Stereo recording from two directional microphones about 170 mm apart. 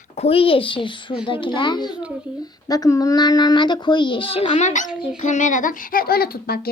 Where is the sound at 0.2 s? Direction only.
35° left (ahead or behind).